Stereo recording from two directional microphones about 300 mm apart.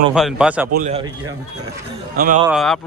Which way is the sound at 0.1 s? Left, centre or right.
Centre.